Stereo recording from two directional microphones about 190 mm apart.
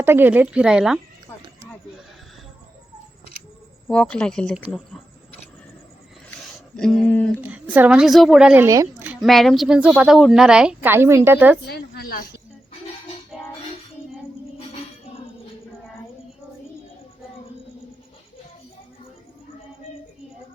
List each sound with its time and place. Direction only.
0.0 s a woman's voice: 10° right (ahead or behind)
3.8 s a woman's voice: 5° left (ahead or behind)
6.7 s a woman's voice: 5° left (ahead or behind)
7.4 s a woman's voice: 10° right (ahead or behind)
8.6 s speech: 15° right (ahead or behind)
9.2 s a woman's voice: centre (ahead or behind)
11.6 s speech: 55° left (ahead or behind)